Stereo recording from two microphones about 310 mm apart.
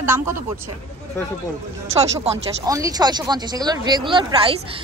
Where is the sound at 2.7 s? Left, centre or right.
Centre.